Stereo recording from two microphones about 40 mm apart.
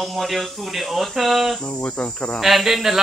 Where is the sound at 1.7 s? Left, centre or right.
Left.